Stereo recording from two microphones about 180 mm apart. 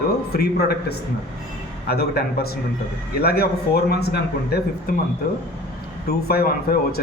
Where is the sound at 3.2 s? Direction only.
60° left (ahead or behind).